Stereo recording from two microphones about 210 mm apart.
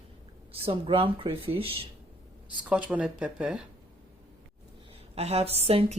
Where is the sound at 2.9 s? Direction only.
5° right (ahead or behind).